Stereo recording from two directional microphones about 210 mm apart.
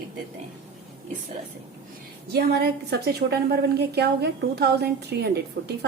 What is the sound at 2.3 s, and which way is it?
A woman's voice, 50° right (ahead or behind).